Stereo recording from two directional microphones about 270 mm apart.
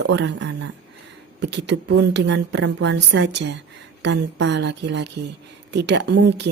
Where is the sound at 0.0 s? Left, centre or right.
Right.